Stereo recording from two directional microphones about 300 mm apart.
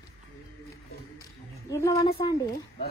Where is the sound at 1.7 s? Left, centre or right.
Centre.